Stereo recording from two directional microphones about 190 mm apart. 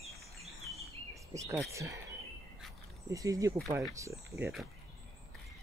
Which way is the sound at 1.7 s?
15° right (ahead or behind).